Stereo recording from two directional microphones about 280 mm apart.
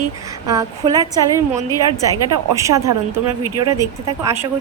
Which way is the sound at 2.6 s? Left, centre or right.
Centre.